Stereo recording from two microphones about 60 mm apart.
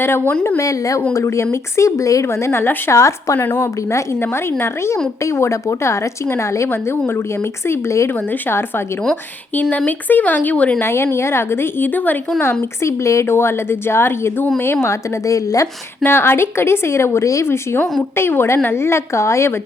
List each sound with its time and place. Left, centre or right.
0.0 s a woman's voice: left
0.6 s a woman's voice: left
1.1 s a woman's voice: left
2.2 s a woman's voice: left
4.6 s a woman's voice: left
7.7 s a woman's voice: left
8.3 s a woman's voice: left
9.6 s speech: left
10.8 s a woman's voice: left
12.8 s a woman's voice: left
13.3 s a woman's voice: left
15.3 s a woman's voice: left
16.0 s a woman's voice: left
17.4 s a woman's voice: left